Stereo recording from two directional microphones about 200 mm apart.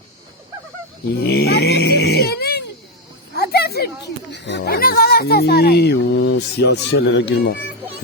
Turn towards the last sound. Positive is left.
turn(degrees=60)  # may be behind; listen again after turning